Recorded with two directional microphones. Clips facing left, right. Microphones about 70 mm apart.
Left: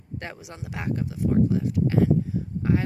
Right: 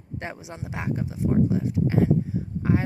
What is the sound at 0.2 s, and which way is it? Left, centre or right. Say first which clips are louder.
Speech: right 4 dB; right.